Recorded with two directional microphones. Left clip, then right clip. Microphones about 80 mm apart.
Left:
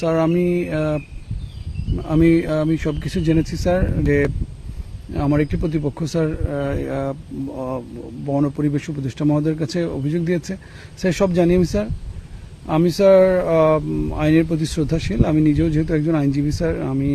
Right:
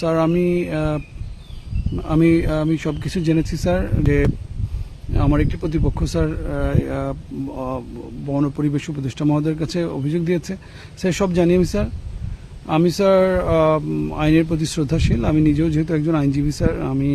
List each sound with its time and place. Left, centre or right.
0.0 s speech: centre
13.9 s speech: centre
14.2 s speech: centre